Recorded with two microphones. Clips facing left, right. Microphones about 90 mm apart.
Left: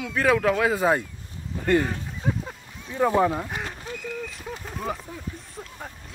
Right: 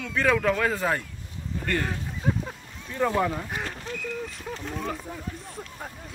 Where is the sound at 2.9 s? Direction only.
15° left (ahead or behind).